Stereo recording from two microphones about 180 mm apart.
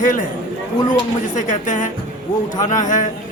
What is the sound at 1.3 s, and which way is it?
Speech, 45° left (ahead or behind).